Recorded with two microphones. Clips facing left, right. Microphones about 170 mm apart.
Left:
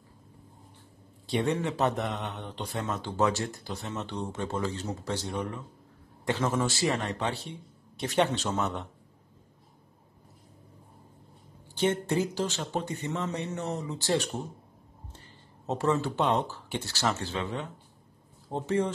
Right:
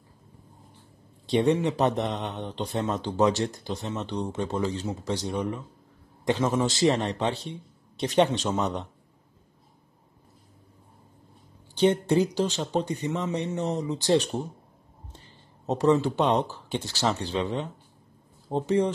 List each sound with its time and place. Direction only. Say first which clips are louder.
1.2 s speech: right 6 dB; 20° right (ahead or behind)
12.2 s speech: right 5 dB; 20° right (ahead or behind)